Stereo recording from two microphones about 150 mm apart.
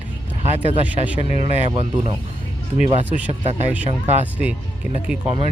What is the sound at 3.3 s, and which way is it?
Speech, 45° right (ahead or behind).